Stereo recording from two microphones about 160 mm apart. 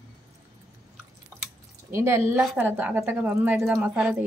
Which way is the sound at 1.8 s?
15° right (ahead or behind).